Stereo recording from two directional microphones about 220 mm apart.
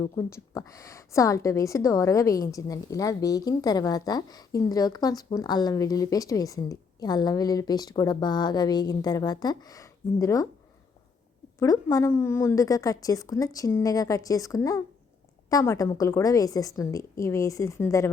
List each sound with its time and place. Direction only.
0.0 s a woman's voice: 15° left (ahead or behind)
11.6 s a woman's voice: 15° left (ahead or behind)